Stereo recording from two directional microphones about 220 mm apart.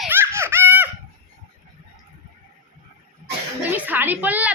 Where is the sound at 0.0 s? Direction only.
10° right (ahead or behind).